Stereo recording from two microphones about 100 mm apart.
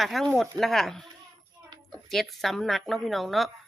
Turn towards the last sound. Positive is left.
turn(degrees=0)  # may be behind; listen again after turning